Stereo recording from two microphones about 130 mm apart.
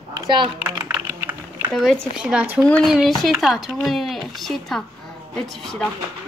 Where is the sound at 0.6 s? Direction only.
20° right (ahead or behind).